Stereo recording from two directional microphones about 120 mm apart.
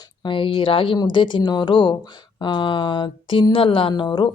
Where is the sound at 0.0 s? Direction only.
40° left (ahead or behind).